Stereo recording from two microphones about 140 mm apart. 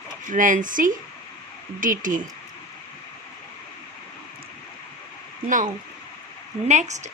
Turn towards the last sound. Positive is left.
turn(degrees=-55)  # may be behind; listen again after turning